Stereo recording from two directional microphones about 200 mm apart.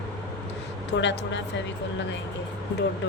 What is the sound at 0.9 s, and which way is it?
Speech, 65° left (ahead or behind).